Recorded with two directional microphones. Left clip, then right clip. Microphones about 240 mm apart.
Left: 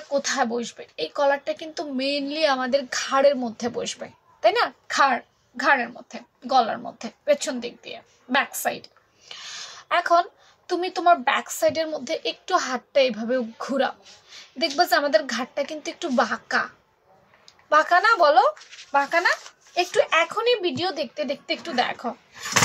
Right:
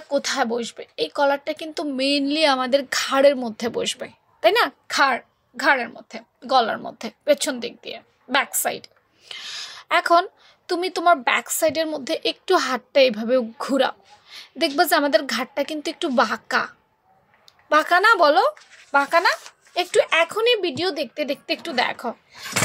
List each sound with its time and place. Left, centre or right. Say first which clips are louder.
0.1 s speech: right 2 dB; right